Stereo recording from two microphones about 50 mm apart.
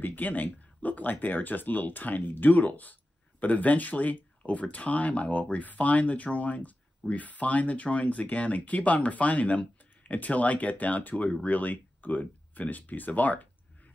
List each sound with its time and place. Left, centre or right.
0.0 s speech: left